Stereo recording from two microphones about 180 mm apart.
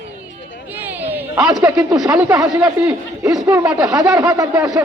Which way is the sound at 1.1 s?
5° right (ahead or behind).